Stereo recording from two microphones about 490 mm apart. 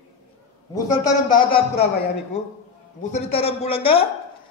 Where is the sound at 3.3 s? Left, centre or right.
Centre.